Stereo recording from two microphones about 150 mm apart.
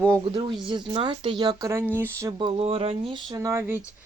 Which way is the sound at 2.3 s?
35° right (ahead or behind).